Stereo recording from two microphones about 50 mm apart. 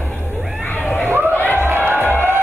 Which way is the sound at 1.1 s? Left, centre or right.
Right.